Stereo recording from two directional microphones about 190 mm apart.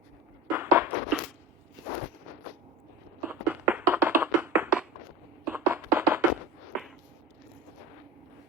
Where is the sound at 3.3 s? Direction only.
10° right (ahead or behind).